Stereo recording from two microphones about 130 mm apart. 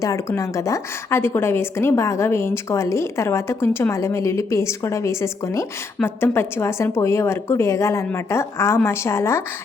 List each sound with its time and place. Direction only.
0.0 s a woman's voice: 25° left (ahead or behind)